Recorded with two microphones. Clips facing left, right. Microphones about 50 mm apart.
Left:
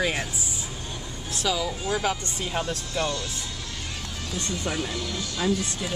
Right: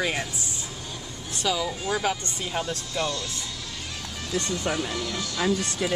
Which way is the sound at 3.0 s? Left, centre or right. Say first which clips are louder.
Left 1 dB; left.